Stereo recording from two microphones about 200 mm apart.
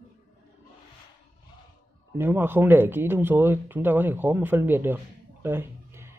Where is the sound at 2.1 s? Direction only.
10° right (ahead or behind).